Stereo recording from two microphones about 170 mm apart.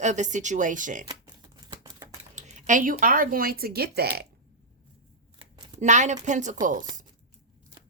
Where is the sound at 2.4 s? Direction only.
45° right (ahead or behind); by 4.2 s 70° right (ahead or behind).